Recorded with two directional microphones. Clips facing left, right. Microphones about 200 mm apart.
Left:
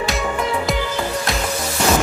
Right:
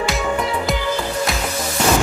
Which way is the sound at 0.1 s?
Centre (ahead or behind).